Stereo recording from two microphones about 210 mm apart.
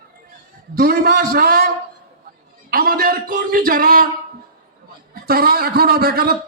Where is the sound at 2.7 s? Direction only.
45° right (ahead or behind).